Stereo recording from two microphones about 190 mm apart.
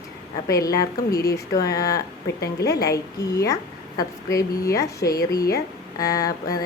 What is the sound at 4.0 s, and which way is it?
A woman's voice, 20° left (ahead or behind).